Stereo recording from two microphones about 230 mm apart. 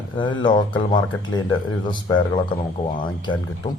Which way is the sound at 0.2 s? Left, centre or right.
Centre.